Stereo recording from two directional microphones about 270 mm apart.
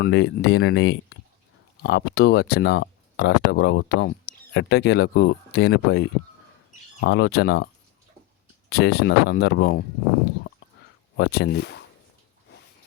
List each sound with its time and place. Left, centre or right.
0.0 s speech: left
8.7 s speech: left
11.2 s speech: left